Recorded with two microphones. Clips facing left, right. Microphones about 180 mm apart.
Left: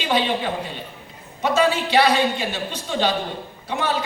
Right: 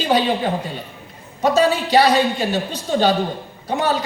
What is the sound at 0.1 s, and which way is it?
A man's voice, 40° right (ahead or behind).